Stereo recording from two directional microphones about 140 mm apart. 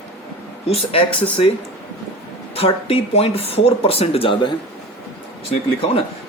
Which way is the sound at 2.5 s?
45° left (ahead or behind).